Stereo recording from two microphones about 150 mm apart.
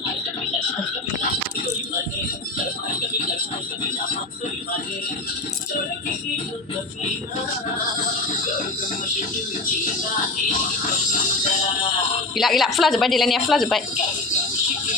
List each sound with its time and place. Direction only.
12.4 s a woman's voice: centre (ahead or behind)